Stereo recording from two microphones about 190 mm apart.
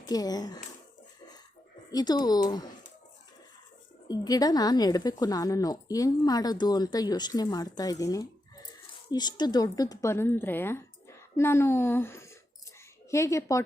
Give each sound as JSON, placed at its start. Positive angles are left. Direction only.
{"t": 0.0, "sound": "a woman's voice", "side_deg": 20}
{"t": 1.9, "sound": "a woman's voice", "side_deg": 20}
{"t": 4.1, "sound": "a woman's voice", "side_deg": 20}